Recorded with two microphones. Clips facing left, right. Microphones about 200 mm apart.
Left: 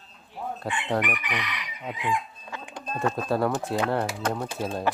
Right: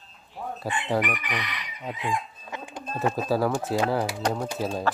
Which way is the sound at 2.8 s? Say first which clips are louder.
Even; 5° right (ahead or behind).